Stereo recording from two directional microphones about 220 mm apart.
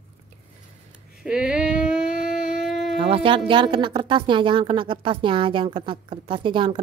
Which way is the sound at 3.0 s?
25° right (ahead or behind).